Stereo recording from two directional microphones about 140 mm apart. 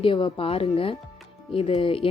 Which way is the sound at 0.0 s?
40° left (ahead or behind).